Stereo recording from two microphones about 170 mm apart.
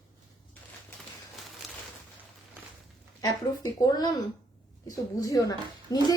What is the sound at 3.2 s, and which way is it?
Speech, 25° left (ahead or behind).